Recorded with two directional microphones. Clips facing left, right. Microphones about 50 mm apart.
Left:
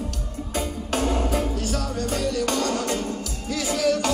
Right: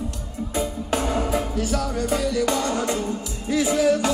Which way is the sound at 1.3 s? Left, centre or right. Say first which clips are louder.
Right 2 dB; right.